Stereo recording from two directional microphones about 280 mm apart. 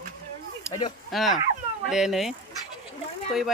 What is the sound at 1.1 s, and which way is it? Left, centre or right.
Speech, centre.